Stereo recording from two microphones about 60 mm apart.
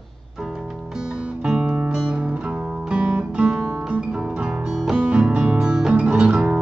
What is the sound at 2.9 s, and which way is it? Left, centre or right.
Guitar, centre.